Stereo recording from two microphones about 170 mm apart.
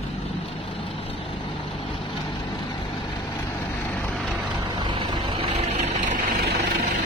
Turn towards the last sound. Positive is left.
turn(degrees=-50)  # may be behind; listen again after turning